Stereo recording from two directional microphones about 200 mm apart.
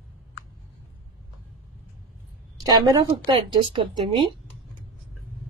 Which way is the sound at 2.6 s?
20° right (ahead or behind).